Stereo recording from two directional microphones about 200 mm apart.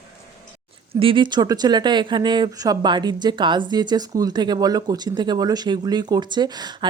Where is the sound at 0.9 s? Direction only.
25° right (ahead or behind).